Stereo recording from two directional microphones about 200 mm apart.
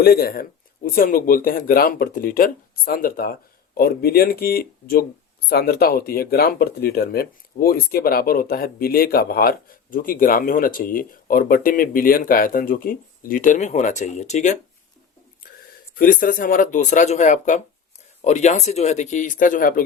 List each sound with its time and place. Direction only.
0.0 s speech: 50° left (ahead or behind)
15.6 s speech: 45° left (ahead or behind)